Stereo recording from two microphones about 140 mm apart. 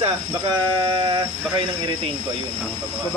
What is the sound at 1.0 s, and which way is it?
Speech, 30° right (ahead or behind).